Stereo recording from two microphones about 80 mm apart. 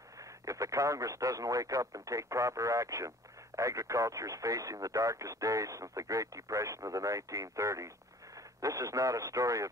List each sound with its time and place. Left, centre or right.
0.2 s speech: right